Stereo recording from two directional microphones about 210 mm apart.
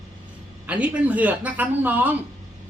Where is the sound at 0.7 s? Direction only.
5° right (ahead or behind).